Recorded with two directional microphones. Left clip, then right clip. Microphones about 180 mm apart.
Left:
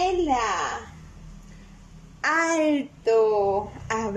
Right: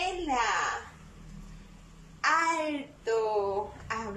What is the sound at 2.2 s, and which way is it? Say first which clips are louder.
A woman's voice: left 5 dB; 40° left (ahead or behind).